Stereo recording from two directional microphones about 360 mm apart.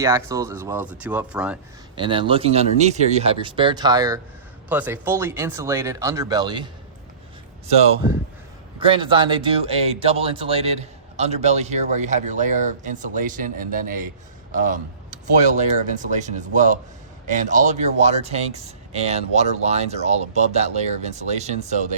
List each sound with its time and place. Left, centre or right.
0.0 s speech: centre
8.8 s speech: centre